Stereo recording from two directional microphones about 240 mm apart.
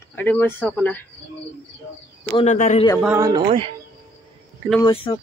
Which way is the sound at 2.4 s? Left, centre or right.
Left.